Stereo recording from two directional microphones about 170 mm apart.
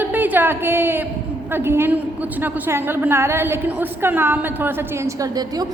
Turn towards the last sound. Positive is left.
turn(degrees=-20)  # may be behind; listen again after turning